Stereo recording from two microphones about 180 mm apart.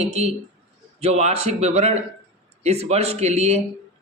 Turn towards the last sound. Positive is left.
turn(degrees=-35)  # may be behind; listen again after turning